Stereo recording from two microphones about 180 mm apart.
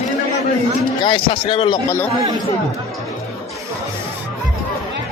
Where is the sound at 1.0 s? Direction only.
25° left (ahead or behind).